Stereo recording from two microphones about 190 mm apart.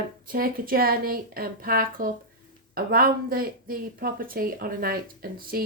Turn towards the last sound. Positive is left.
turn(degrees=-50)  # may be behind; listen again after turning